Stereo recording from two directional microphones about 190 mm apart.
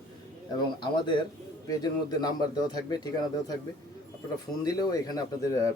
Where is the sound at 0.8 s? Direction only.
25° left (ahead or behind).